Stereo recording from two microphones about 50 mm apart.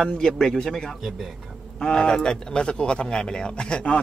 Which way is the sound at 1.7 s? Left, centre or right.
Centre.